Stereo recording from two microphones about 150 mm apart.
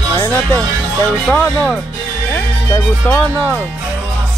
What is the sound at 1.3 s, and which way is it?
Speech, 5° left (ahead or behind).